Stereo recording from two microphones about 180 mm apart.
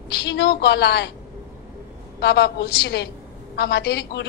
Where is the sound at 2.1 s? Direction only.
65° left (ahead or behind).